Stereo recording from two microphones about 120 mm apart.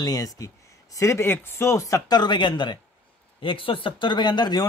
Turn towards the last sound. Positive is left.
turn(degrees=40)  # may be behind; listen again after turning